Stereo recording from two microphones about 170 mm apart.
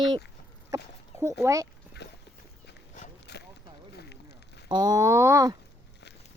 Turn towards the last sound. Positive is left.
turn(degrees=-20)  # may be behind; listen again after turning